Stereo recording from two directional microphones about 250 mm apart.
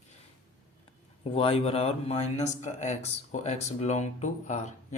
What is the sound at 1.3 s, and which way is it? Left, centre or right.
Speech, left.